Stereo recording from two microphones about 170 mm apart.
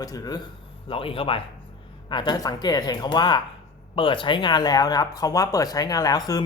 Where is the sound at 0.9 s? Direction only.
30° left (ahead or behind).